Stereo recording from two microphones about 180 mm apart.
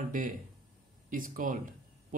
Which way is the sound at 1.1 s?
50° right (ahead or behind).